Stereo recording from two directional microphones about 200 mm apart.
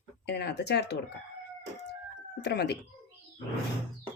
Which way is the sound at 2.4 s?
55° left (ahead or behind).